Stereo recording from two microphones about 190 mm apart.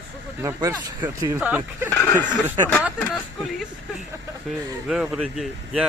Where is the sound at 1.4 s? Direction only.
10° right (ahead or behind).